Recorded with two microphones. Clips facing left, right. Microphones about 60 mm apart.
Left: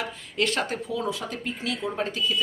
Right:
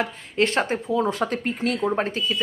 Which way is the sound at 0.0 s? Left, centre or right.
Right.